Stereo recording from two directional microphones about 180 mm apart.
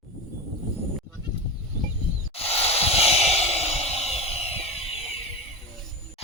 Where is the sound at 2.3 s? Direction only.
35° left (ahead or behind).